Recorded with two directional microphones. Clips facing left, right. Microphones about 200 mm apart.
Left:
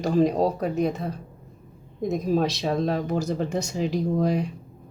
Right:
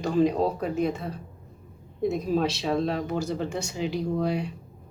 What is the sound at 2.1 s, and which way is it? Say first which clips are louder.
Speech: left 3 dB; 45° left (ahead or behind).